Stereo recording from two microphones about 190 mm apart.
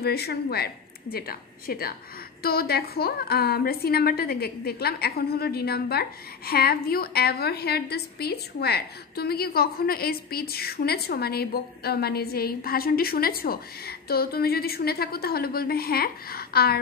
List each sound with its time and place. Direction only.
0.0 s a woman's voice: 55° left (ahead or behind)